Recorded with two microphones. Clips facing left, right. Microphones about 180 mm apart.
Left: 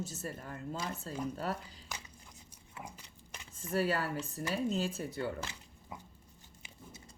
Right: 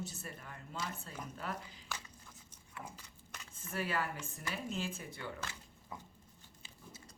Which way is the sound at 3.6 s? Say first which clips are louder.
Left 6 dB; 40° left (ahead or behind).